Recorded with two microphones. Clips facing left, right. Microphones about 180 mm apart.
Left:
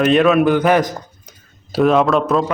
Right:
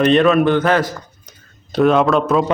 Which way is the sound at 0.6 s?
15° left (ahead or behind).